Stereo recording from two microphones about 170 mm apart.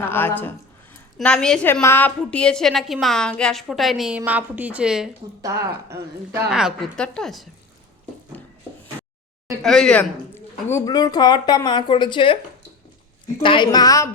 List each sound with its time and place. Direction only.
0.0 s a woman's voice: 10° left (ahead or behind); by 5.1 s 5° right (ahead or behind)
5.4 s a woman's voice: 15° right (ahead or behind)
6.5 s a woman's voice: 5° right (ahead or behind)
9.6 s a woman's voice: 5° left (ahead or behind)
10.7 s speech: 20° left (ahead or behind)
13.4 s speech: 30° left (ahead or behind)